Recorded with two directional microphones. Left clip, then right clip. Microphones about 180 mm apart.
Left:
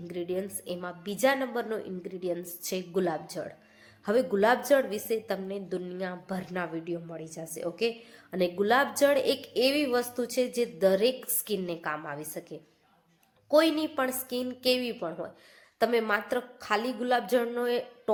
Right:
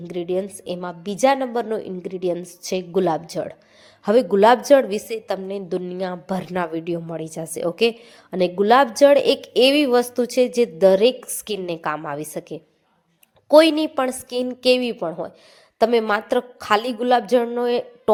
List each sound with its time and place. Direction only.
0.0 s a woman's voice: 35° right (ahead or behind)